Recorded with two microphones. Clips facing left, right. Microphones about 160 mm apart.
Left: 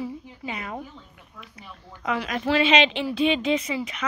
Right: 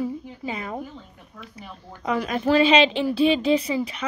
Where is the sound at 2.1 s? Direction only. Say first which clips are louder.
Right 3 dB; 35° right (ahead or behind).